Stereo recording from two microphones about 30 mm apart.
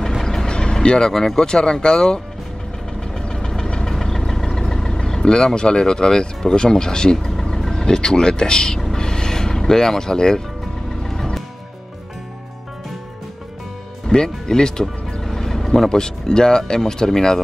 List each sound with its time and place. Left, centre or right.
0.2 s vehicle: centre
1.1 s speech: centre
3.2 s vehicle: left
5.2 s speech: left
8.9 s music: left
14.1 s speech: left
15.3 s vehicle: centre
15.9 s speech: left